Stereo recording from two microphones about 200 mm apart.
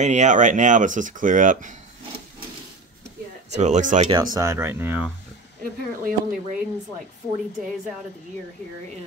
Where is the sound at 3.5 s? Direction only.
35° right (ahead or behind).